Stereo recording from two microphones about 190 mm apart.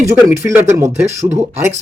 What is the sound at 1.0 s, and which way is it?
Speech, 35° right (ahead or behind).